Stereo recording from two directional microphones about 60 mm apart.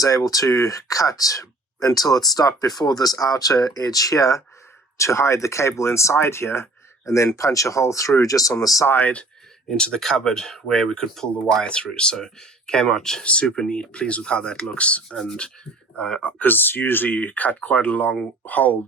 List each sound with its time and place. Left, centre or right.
0.0 s speech: left
4.9 s speech: left
8.9 s speech: left
9.6 s speech: centre
15.2 s speech: centre
16.4 s speech: left